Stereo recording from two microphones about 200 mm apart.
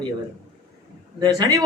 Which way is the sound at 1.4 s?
15° right (ahead or behind).